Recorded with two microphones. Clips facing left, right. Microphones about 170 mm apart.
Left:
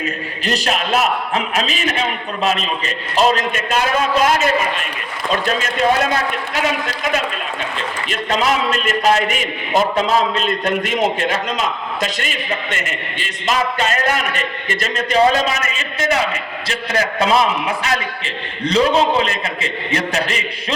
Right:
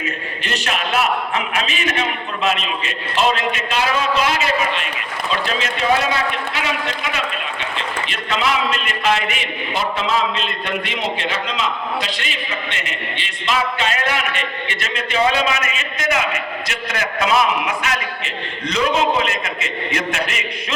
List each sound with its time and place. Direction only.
0.4 s a man's voice: 35° left (ahead or behind)
8.1 s a man's voice: 40° left (ahead or behind)
18.6 s a man's voice: 30° left (ahead or behind)